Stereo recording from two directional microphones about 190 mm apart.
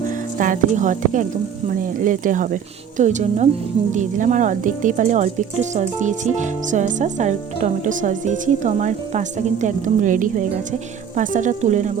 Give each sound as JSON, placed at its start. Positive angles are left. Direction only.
{"t": 0.1, "sound": "speech", "side_deg": -45}